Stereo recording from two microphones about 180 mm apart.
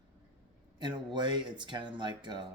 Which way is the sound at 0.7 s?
25° right (ahead or behind).